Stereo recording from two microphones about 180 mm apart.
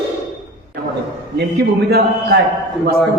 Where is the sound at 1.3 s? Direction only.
65° right (ahead or behind).